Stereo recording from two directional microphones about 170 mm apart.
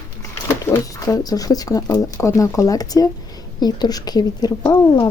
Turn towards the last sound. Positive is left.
turn(degrees=25)  # may be behind; listen again after turning